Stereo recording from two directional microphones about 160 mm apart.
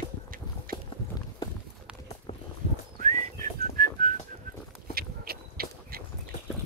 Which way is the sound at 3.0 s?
50° right (ahead or behind).